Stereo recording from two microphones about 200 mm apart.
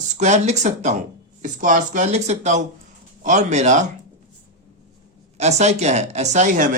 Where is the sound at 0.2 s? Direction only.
35° right (ahead or behind).